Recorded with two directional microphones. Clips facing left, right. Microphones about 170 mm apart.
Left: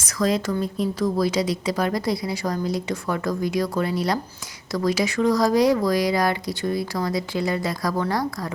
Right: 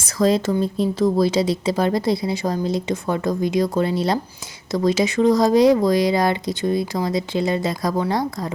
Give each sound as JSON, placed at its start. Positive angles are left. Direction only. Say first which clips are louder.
{"t": 0.0, "sound": "speech", "louder": "right 4 dB", "side_deg": -30}